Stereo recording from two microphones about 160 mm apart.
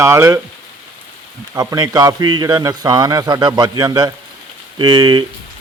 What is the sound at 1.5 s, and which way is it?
A man's voice, 20° right (ahead or behind).